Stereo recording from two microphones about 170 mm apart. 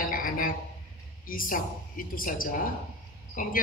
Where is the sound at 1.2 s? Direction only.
55° left (ahead or behind).